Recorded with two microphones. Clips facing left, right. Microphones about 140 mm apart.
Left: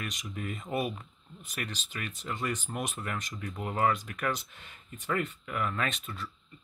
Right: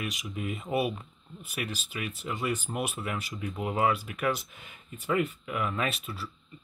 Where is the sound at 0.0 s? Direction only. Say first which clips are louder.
Right 3 dB; 10° right (ahead or behind).